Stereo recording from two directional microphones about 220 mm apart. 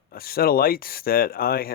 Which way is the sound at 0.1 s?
45° left (ahead or behind).